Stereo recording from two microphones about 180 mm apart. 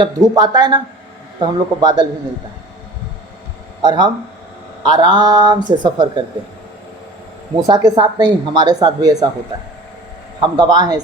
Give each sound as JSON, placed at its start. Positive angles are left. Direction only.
{"t": 0.0, "sound": "a woman's voice", "side_deg": -25}
{"t": 3.8, "sound": "a woman's voice", "side_deg": -25}
{"t": 7.5, "sound": "a woman's voice", "side_deg": -25}
{"t": 10.4, "sound": "a woman's voice", "side_deg": -25}